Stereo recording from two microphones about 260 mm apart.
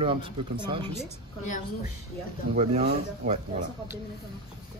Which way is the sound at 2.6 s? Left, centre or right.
Right.